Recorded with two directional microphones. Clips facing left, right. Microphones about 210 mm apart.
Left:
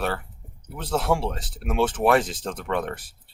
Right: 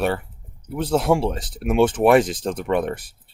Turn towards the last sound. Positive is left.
turn(degrees=-15)  # may be behind; listen again after turning